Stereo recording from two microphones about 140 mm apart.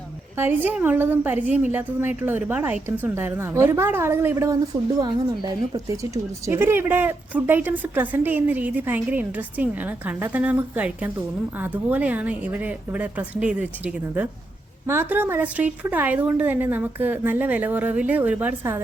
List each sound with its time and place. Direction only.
0.3 s a woman's voice: 15° right (ahead or behind)
4.9 s a woman's voice: 30° right (ahead or behind); by 18.8 s 15° right (ahead or behind)